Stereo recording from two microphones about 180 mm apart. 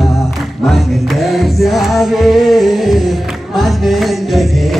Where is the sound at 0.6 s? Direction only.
Centre (ahead or behind).